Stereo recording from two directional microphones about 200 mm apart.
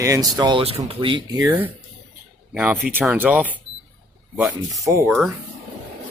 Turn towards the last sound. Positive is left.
turn(degrees=0)  # may be behind; listen again after turning